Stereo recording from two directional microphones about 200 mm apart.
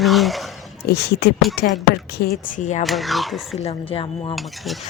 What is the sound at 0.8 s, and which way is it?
Speech, 55° left (ahead or behind).